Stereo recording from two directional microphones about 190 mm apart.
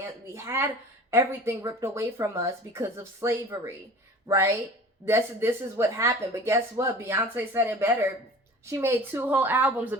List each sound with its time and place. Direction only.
0.3 s speech: 15° right (ahead or behind)